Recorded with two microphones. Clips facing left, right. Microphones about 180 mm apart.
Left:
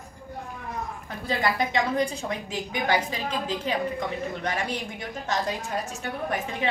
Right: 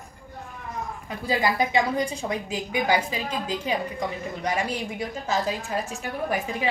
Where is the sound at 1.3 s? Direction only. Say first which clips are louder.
Right 2 dB; 10° right (ahead or behind).